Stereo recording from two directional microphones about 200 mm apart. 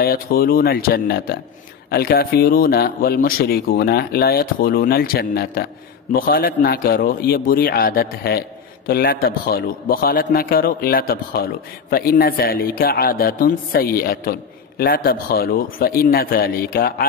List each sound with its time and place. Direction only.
0.0 s a man's voice: 50° left (ahead or behind)